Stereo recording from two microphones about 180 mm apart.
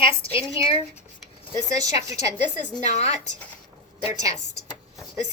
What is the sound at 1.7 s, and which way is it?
Speech, 20° right (ahead or behind).